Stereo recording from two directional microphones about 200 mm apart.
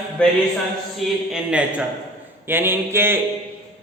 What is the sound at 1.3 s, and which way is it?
A man's voice, 5° right (ahead or behind).